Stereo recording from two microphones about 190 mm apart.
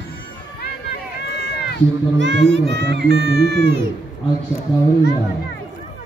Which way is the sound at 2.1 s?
70° right (ahead or behind).